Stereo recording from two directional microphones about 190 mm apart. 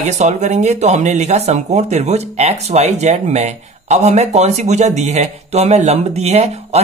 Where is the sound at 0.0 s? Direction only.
40° right (ahead or behind).